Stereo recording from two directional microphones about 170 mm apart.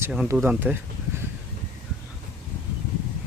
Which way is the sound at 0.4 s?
10° right (ahead or behind).